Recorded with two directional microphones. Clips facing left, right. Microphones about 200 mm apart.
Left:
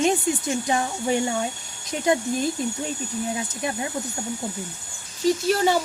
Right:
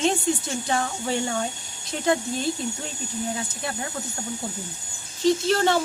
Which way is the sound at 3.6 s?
15° left (ahead or behind).